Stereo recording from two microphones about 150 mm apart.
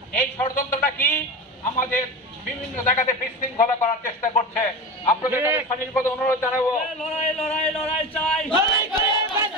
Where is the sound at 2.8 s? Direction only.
60° left (ahead or behind).